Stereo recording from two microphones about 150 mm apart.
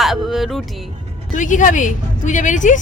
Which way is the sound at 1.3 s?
60° left (ahead or behind).